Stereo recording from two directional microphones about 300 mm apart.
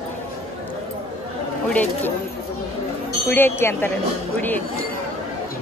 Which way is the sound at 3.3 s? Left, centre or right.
Centre.